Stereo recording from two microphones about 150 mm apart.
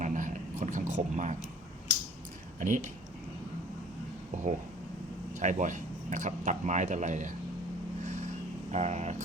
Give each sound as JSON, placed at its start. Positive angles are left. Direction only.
{"t": 0.0, "sound": "a sound", "side_deg": -60}
{"t": 2.6, "sound": "speech", "side_deg": -60}
{"t": 5.4, "sound": "speech", "side_deg": -55}
{"t": 8.7, "sound": "speech", "side_deg": -50}